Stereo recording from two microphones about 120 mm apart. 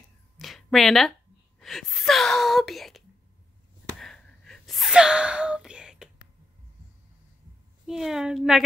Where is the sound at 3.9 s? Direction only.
5° left (ahead or behind).